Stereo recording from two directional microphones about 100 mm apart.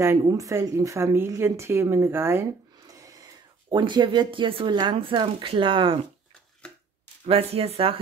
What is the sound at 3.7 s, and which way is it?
Speech, 50° right (ahead or behind).